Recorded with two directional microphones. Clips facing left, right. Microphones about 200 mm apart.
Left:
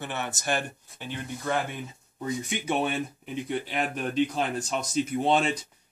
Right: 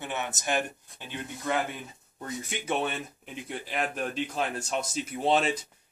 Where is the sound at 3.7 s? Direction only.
Centre (ahead or behind).